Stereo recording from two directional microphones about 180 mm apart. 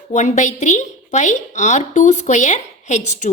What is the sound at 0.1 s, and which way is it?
A woman's voice, 40° left (ahead or behind).